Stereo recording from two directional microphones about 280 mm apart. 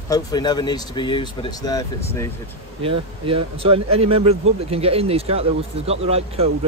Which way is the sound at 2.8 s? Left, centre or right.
Centre.